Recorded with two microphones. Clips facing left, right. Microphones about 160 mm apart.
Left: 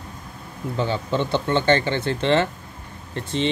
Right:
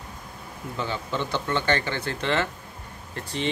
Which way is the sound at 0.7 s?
30° left (ahead or behind).